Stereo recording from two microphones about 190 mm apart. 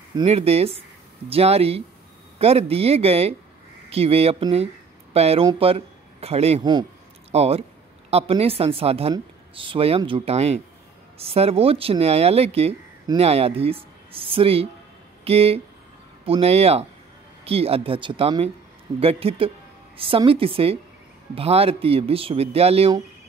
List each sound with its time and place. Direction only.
0.1 s speech: 30° right (ahead or behind)